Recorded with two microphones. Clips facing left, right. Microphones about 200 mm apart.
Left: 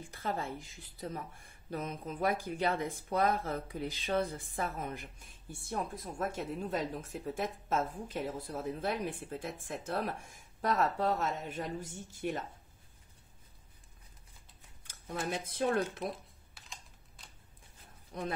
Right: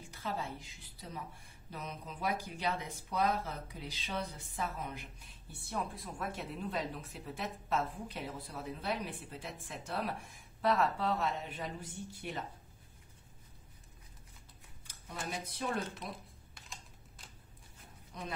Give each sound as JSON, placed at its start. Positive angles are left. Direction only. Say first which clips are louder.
{"t": 0.1, "sound": "speech", "louder": "left 3 dB", "side_deg": 50}
{"t": 15.4, "sound": "speech", "louder": "left 7 dB", "side_deg": 55}
{"t": 16.1, "sound": "computer keyboard", "louder": "left 4 dB", "side_deg": 0}